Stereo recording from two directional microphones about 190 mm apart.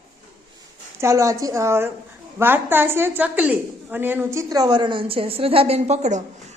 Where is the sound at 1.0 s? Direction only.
15° right (ahead or behind).